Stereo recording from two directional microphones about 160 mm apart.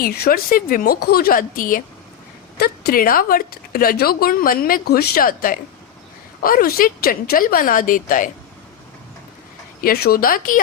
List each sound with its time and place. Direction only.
0.0 s speech: 70° left (ahead or behind)
9.8 s speech: 70° left (ahead or behind)